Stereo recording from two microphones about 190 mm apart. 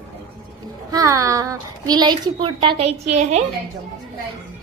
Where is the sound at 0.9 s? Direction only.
15° right (ahead or behind); by 3.4 s 35° right (ahead or behind).